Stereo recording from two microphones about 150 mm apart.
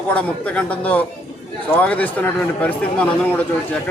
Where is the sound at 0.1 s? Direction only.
10° left (ahead or behind).